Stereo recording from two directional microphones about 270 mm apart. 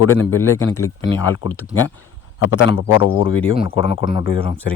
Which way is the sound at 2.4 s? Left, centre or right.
Left.